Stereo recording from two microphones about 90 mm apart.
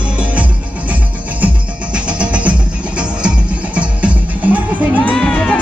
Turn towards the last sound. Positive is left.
turn(degrees=15)  # may be behind; listen again after turning